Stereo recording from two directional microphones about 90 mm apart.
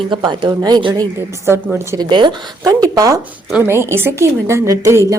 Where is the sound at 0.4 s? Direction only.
50° right (ahead or behind).